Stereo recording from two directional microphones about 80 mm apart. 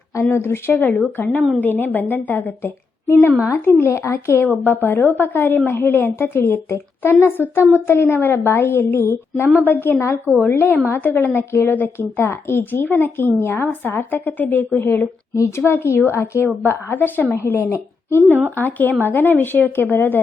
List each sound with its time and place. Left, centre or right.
0.2 s a woman's voice: left
9.6 s a woman's voice: left
18.2 s a woman's voice: right
18.5 s a woman's voice: left